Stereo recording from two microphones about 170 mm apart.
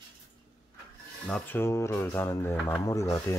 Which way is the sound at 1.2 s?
10° left (ahead or behind).